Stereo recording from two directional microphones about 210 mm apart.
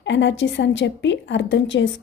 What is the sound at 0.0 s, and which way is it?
A woman's voice, 60° left (ahead or behind).